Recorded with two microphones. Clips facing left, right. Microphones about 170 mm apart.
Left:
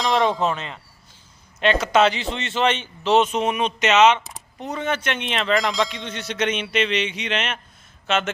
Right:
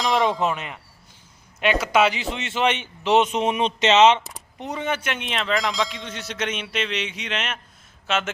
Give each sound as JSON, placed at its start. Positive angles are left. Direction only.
{"t": 0.0, "sound": "a man's voice", "side_deg": 0}
{"t": 4.6, "sound": "speech", "side_deg": -15}